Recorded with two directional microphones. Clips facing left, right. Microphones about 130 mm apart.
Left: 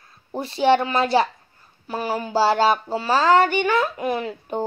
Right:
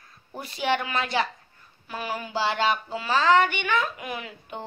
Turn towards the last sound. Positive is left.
turn(degrees=40)  # may be behind; listen again after turning